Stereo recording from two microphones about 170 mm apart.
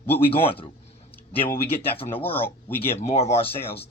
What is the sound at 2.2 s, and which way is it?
Speech, 35° left (ahead or behind).